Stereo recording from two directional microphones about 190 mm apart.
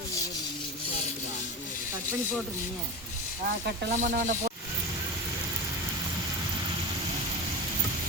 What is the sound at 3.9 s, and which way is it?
Speech, 45° right (ahead or behind).